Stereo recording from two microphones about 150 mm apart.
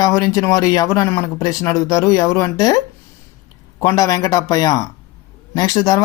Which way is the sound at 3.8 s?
25° left (ahead or behind).